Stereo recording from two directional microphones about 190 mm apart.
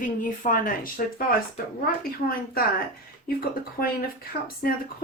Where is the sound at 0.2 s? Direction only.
45° left (ahead or behind).